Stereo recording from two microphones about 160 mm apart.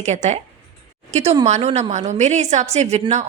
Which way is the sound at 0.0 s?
45° right (ahead or behind).